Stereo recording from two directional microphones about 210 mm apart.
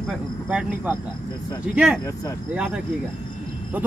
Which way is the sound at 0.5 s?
5° right (ahead or behind).